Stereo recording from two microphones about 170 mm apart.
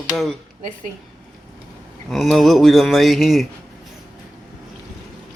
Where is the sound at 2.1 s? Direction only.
Centre (ahead or behind).